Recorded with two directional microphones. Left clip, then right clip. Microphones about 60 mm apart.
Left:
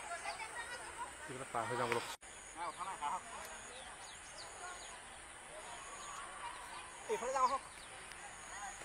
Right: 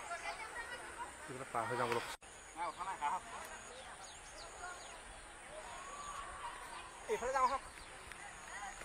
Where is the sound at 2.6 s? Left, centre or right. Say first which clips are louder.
Right 2 dB; right.